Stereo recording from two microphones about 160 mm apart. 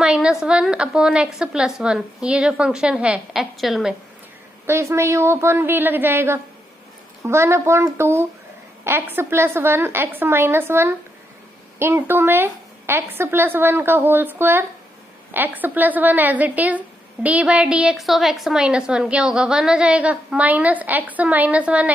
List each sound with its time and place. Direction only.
0.0 s a woman's voice: 5° right (ahead or behind)
4.6 s a woman's voice: 15° right (ahead or behind)